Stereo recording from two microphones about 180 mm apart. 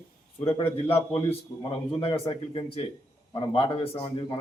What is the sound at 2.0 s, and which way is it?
A man's voice, 30° left (ahead or behind).